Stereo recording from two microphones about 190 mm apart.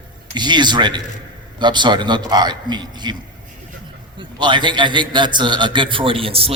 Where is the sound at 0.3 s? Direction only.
25° right (ahead or behind).